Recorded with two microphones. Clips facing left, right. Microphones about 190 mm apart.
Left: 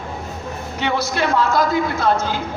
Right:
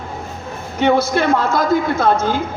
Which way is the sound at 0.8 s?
50° right (ahead or behind).